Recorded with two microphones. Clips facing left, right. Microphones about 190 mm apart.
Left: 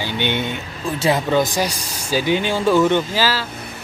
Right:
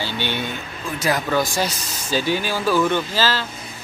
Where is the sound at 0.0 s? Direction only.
20° left (ahead or behind).